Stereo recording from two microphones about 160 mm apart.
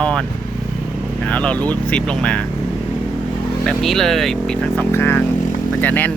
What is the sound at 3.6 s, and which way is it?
Speech, centre (ahead or behind).